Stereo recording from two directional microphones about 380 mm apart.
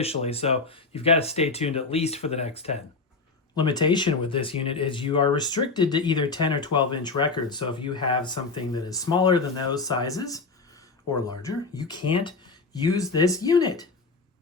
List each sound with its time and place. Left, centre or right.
0.0 s speech: centre